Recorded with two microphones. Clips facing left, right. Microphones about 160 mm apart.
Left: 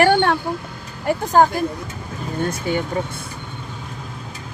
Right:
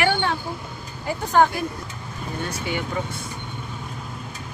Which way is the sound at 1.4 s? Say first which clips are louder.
Left 2 dB; 40° left (ahead or behind).